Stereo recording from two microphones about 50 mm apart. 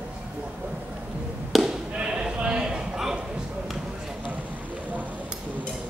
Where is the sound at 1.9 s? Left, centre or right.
Centre.